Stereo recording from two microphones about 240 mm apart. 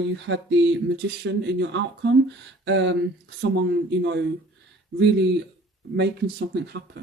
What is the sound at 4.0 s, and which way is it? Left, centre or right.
Speech, right.